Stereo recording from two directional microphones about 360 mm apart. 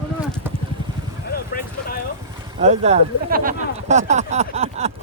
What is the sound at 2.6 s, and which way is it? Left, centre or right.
Speech, centre.